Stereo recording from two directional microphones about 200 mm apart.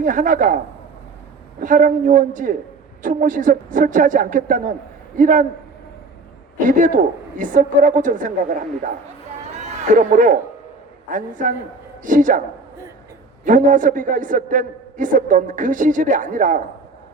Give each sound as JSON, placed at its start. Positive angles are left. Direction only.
{"t": 0.0, "sound": "a man's voice", "side_deg": -40}
{"t": 1.6, "sound": "a man's voice", "side_deg": -40}
{"t": 6.7, "sound": "a man's voice", "side_deg": -40}
{"t": 9.6, "sound": "a sound", "side_deg": -40}
{"t": 11.1, "sound": "a man's voice", "side_deg": -40}
{"t": 13.4, "sound": "a man's voice", "side_deg": -40}